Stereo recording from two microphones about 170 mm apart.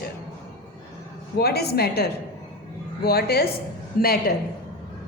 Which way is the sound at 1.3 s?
70° left (ahead or behind).